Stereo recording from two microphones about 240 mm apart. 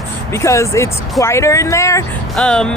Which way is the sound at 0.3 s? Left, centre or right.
Centre.